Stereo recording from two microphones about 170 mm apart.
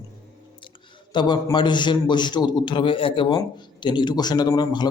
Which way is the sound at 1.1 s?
25° left (ahead or behind).